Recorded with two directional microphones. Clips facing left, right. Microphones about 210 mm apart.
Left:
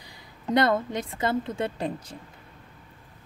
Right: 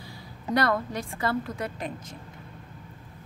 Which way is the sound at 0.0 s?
20° left (ahead or behind).